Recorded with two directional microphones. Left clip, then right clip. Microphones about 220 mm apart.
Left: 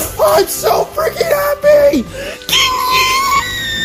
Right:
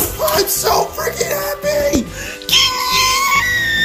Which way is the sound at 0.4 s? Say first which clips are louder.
Left 3 dB; 5° left (ahead or behind).